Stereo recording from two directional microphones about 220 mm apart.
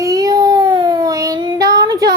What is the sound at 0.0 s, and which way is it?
Child singing, 15° right (ahead or behind).